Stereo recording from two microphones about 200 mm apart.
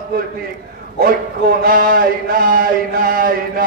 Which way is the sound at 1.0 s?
45° right (ahead or behind).